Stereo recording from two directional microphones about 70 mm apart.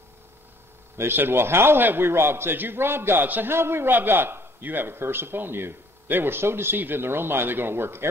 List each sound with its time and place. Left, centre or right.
0.9 s a man's voice: right